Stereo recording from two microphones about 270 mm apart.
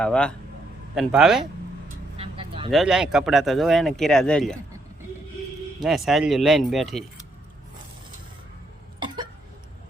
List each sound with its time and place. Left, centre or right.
0.0 s speech: centre
2.1 s vehicle: right
2.6 s speech: centre
5.8 s speech: centre